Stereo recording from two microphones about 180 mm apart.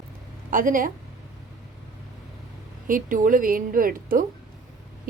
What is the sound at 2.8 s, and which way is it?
Speech, 50° right (ahead or behind).